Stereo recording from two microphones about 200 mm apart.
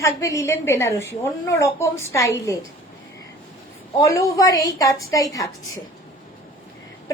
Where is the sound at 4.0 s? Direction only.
15° left (ahead or behind).